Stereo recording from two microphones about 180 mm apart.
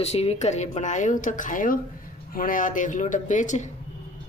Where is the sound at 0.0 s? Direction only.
35° left (ahead or behind).